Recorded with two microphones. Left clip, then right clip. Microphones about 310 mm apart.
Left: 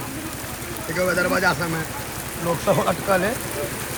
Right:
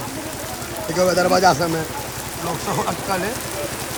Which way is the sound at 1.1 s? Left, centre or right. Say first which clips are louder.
Right 5 dB; centre.